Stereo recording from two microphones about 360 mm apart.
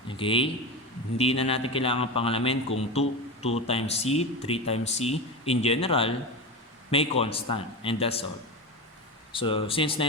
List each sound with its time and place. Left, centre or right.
0.2 s speech: centre
9.3 s speech: centre